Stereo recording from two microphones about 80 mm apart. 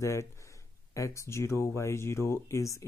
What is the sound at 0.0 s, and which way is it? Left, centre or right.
Speech, left.